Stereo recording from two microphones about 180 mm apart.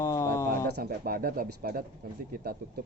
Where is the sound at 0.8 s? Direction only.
55° right (ahead or behind).